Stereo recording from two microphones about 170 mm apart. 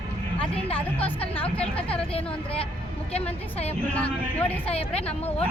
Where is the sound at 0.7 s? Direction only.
10° left (ahead or behind).